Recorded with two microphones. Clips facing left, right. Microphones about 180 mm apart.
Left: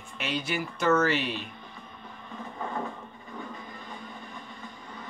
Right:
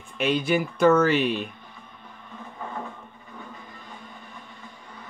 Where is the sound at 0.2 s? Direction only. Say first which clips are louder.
Right 8 dB; 55° right (ahead or behind).